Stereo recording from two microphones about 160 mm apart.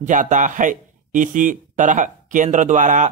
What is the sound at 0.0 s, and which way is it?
A man's voice, 50° right (ahead or behind).